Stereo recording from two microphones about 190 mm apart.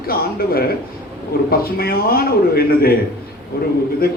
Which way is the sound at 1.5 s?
50° left (ahead or behind).